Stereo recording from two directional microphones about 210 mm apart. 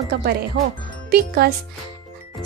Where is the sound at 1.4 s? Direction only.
50° right (ahead or behind).